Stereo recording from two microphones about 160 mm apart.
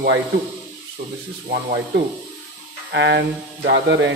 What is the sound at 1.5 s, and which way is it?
Speech, 65° right (ahead or behind).